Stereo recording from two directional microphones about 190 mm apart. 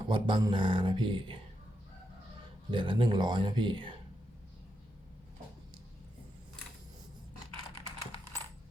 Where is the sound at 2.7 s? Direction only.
25° right (ahead or behind).